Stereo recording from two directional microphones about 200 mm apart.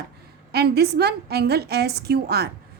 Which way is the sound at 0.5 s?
55° right (ahead or behind).